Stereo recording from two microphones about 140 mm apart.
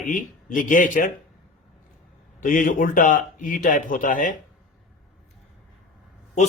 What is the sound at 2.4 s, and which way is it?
A man's voice, 75° left (ahead or behind).